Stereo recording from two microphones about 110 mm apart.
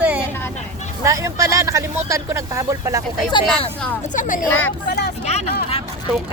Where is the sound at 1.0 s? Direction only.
30° right (ahead or behind).